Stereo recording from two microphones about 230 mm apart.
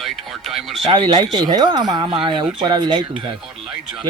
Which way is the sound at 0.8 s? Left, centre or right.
Right.